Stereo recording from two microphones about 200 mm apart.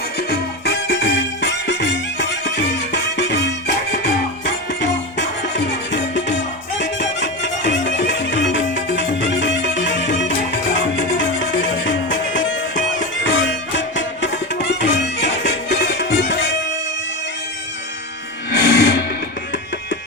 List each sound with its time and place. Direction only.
0.2 s music: 55° left (ahead or behind)
11.9 s music: 65° left (ahead or behind)
18.5 s music: 55° left (ahead or behind)